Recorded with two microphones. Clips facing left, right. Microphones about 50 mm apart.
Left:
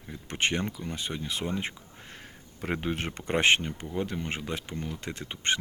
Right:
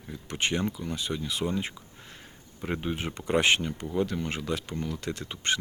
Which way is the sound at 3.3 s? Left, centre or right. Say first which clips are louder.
Even; left.